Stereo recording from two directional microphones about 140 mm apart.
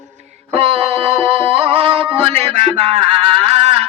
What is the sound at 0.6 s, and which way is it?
Music, 45° right (ahead or behind).